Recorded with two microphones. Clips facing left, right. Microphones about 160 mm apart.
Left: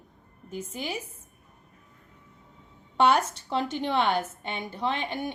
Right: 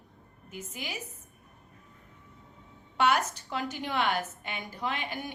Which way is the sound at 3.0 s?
30° left (ahead or behind).